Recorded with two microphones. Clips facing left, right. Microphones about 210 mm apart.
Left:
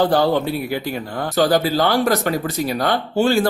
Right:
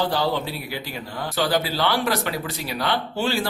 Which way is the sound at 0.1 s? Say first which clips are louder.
Left 7 dB; 50° left (ahead or behind).